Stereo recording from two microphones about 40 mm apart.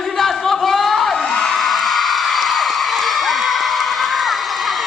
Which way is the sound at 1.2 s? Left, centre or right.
Left.